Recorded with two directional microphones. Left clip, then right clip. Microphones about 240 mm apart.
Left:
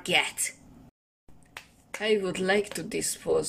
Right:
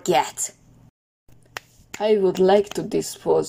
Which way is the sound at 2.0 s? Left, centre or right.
Centre.